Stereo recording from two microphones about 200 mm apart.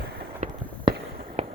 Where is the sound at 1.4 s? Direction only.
30° right (ahead or behind).